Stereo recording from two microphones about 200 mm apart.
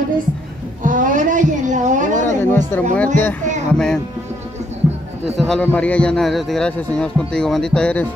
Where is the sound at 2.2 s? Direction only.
10° left (ahead or behind).